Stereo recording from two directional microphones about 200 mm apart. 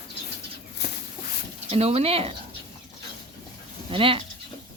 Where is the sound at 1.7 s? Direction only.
30° right (ahead or behind).